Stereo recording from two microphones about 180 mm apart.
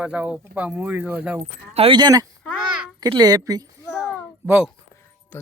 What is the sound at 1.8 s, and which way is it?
Speech, 25° right (ahead or behind).